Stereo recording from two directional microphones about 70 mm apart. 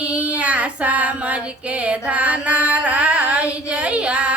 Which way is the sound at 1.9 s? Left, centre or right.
Centre.